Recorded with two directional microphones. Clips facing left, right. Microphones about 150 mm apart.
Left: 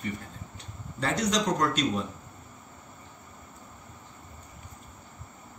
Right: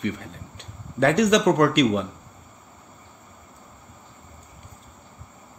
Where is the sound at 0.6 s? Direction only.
70° right (ahead or behind).